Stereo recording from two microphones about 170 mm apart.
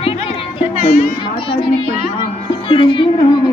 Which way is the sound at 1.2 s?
30° left (ahead or behind).